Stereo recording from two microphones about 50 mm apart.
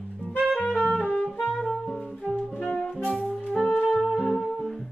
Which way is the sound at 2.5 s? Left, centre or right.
Left.